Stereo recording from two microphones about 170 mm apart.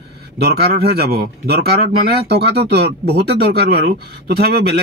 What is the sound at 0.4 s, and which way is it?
Speech, 70° right (ahead or behind).